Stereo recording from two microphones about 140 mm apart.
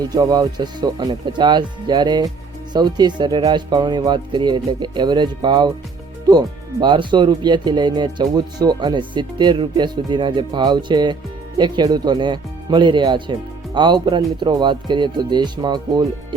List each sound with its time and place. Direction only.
0.0 s speech: 25° right (ahead or behind)